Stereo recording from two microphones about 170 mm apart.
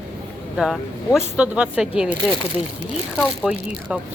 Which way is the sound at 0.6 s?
Centre (ahead or behind).